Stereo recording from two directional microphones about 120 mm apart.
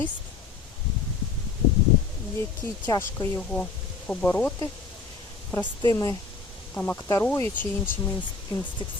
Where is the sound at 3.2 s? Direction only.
10° left (ahead or behind).